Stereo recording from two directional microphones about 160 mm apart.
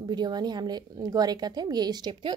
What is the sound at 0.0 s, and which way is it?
Speech, 25° right (ahead or behind).